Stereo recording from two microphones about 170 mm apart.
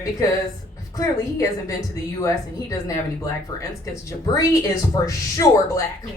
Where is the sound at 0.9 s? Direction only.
20° left (ahead or behind).